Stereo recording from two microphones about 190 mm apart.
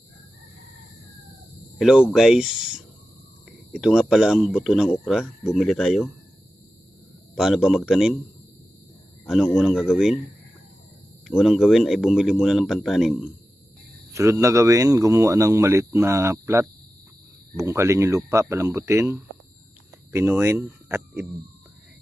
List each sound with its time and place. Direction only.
1.8 s speech: 5° right (ahead or behind)
7.3 s speech: 5° right (ahead or behind)
9.2 s speech: 5° right (ahead or behind)
11.3 s speech: centre (ahead or behind)
14.1 s speech: 15° right (ahead or behind)